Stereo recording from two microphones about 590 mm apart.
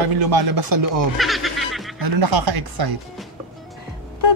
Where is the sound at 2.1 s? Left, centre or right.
Right.